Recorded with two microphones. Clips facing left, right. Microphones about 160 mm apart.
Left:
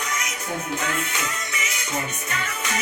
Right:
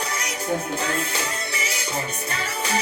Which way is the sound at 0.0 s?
35° right (ahead or behind).